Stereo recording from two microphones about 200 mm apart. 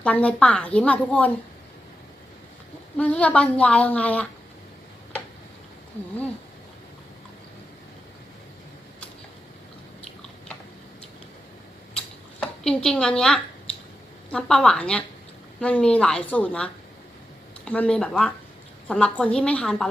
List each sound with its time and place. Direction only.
0.0 s speech: 5° left (ahead or behind)
3.0 s speech: 5° left (ahead or behind)
11.9 s a sound: 5° left (ahead or behind)
14.3 s a woman's voice: 5° left (ahead or behind)
17.7 s a woman's voice: 5° left (ahead or behind)